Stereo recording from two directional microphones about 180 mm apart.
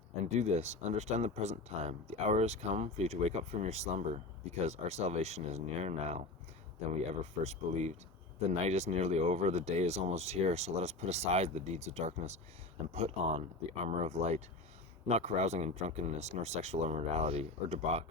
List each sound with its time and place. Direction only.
0.3 s speech: 40° right (ahead or behind)